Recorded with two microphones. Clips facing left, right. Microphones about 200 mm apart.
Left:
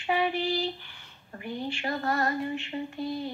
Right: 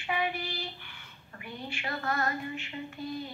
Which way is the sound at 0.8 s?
35° left (ahead or behind).